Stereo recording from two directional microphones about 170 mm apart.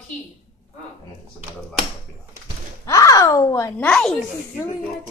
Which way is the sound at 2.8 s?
20° left (ahead or behind).